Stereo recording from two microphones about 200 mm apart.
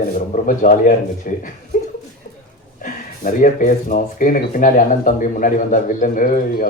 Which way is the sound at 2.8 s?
40° left (ahead or behind).